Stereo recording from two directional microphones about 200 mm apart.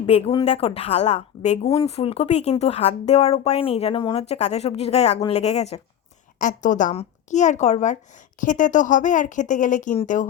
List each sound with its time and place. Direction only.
0.0 s speech: 30° left (ahead or behind)